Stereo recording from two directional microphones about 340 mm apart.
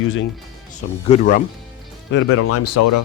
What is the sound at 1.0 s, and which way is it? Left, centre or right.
Speech, left.